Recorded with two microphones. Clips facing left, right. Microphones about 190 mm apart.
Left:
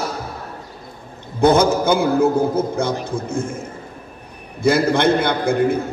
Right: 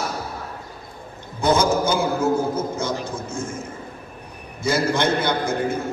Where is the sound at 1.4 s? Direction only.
60° left (ahead or behind).